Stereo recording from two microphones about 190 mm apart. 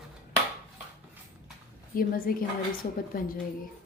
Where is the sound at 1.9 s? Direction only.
50° left (ahead or behind).